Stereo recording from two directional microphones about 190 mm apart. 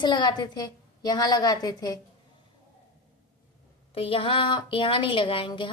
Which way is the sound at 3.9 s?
30° left (ahead or behind).